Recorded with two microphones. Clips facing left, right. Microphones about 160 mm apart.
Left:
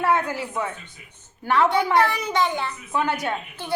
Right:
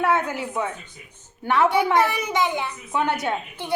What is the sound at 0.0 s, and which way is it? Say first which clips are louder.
A woman's voice: even; 20° right (ahead or behind).